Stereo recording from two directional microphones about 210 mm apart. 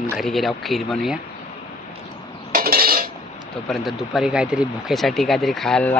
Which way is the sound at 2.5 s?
45° right (ahead or behind).